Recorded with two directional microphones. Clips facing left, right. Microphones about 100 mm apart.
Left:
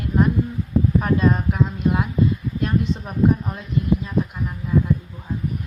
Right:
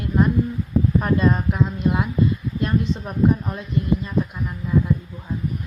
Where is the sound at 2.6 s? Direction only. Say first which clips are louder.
Even; centre (ahead or behind).